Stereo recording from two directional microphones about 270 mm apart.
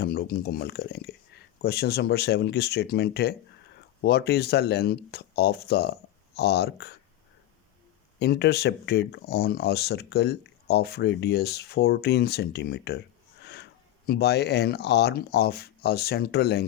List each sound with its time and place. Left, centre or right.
0.0 s speech: left
8.2 s speech: left
14.1 s speech: left